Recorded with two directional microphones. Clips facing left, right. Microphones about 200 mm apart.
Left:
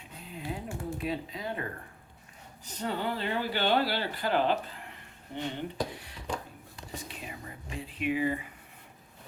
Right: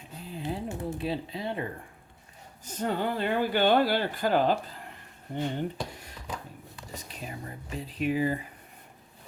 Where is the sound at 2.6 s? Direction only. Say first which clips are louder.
Right 3 dB; 45° right (ahead or behind).